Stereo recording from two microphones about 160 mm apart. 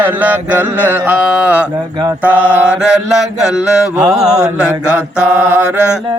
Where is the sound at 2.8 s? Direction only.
5° right (ahead or behind).